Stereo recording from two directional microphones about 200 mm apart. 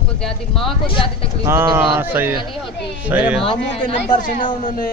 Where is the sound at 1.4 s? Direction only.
10° right (ahead or behind).